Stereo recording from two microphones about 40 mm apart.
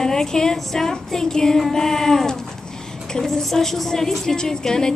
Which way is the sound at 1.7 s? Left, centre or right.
Centre.